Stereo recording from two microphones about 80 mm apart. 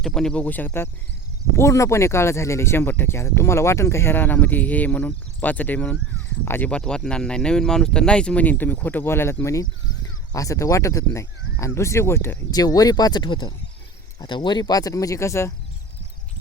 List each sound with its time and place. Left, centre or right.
0.0 s speech: centre
0.4 s speech: left
1.5 s speech: left
6.7 s speech: centre; by 12.4 s left
12.5 s speech: left